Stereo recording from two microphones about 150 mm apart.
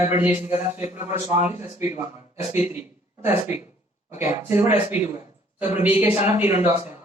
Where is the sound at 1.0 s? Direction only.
15° right (ahead or behind).